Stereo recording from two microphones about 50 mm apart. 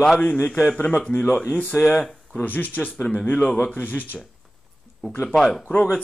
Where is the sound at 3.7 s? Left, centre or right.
Left.